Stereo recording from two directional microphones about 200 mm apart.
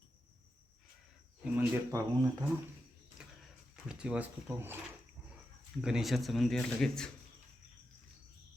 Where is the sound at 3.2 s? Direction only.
5° right (ahead or behind).